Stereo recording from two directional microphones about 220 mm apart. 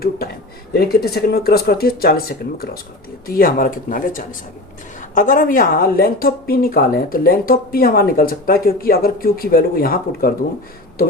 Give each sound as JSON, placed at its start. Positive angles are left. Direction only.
{"t": 0.7, "sound": "a woman's voice", "side_deg": 45}